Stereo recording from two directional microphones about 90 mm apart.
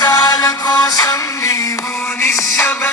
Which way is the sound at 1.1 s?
35° left (ahead or behind).